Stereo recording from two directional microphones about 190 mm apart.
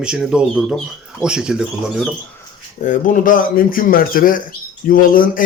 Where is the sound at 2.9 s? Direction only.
45° left (ahead or behind).